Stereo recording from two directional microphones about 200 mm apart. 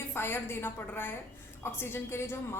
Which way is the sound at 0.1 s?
10° left (ahead or behind).